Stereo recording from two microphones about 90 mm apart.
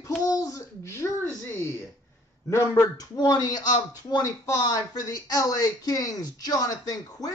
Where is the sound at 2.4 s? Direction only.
30° left (ahead or behind).